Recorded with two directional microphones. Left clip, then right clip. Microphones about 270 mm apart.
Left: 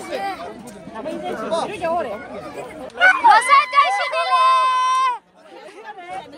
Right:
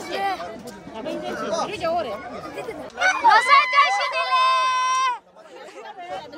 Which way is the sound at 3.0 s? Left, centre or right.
Left.